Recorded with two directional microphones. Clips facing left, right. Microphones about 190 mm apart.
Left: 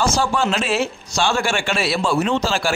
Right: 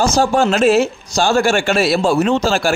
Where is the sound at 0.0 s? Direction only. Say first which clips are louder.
Right 5 dB; 40° right (ahead or behind).